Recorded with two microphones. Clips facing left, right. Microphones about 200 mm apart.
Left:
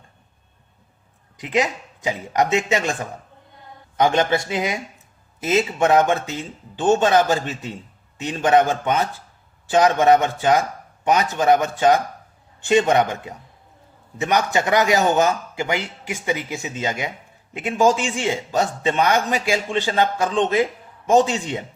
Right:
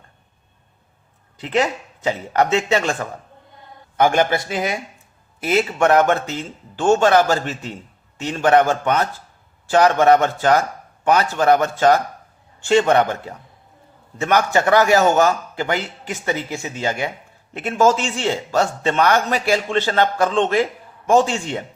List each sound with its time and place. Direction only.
1.4 s a man's voice: 15° left (ahead or behind)